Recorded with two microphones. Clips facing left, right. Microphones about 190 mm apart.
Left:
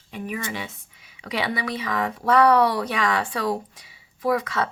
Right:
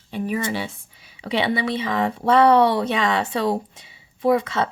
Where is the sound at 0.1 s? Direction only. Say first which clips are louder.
Right 6 dB; 30° right (ahead or behind).